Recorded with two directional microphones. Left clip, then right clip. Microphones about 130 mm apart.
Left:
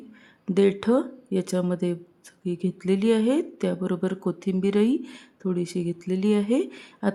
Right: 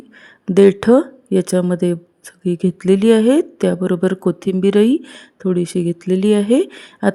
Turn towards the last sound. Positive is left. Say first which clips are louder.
# right 10 dB
turn(degrees=-50)  # may be behind; listen again after turning